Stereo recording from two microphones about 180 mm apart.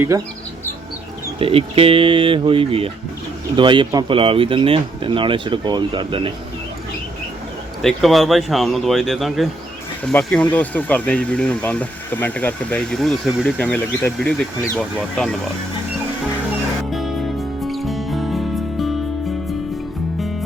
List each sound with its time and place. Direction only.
1.4 s speech: 30° right (ahead or behind)
7.8 s speech: centre (ahead or behind)
16.9 s music: centre (ahead or behind)